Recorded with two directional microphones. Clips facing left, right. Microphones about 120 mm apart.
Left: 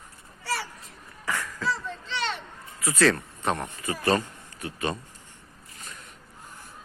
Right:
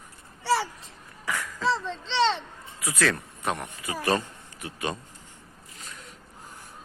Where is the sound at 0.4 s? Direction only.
25° right (ahead or behind).